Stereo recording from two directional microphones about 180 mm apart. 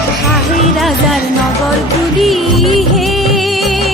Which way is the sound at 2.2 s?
Centre (ahead or behind).